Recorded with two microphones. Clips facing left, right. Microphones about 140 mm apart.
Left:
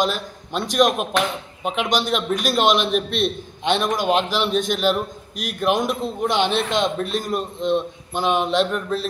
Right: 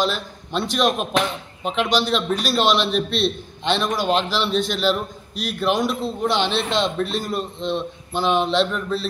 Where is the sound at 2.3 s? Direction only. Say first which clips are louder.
Left 2 dB; 50° left (ahead or behind).